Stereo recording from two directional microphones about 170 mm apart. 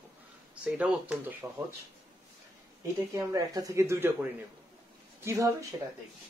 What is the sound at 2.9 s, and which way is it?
Speech, 20° right (ahead or behind).